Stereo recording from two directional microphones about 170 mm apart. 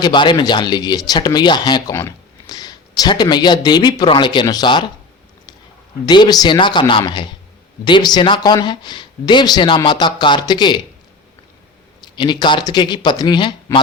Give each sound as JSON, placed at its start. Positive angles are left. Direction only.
{"t": 0.0, "sound": "speech", "side_deg": 25}
{"t": 6.1, "sound": "speech", "side_deg": 25}
{"t": 12.0, "sound": "speech", "side_deg": 25}